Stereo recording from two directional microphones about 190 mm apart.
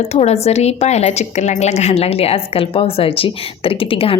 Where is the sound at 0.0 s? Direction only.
35° left (ahead or behind).